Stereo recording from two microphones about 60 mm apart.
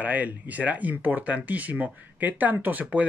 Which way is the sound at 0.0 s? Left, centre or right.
Right.